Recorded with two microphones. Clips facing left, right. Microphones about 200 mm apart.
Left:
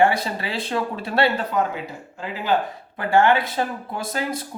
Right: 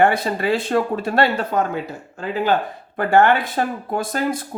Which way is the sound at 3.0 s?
55° right (ahead or behind).